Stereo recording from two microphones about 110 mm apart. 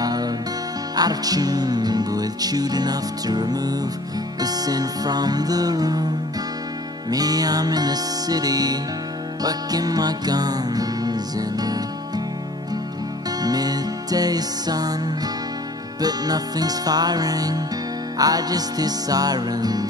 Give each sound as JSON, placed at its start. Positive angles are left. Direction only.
{"t": 0.0, "sound": "music", "side_deg": -35}
{"t": 7.1, "sound": "music", "side_deg": -35}
{"t": 13.4, "sound": "music", "side_deg": -35}